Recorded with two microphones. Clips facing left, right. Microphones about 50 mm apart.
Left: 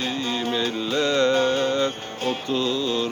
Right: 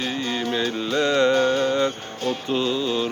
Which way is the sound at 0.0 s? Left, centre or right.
Right.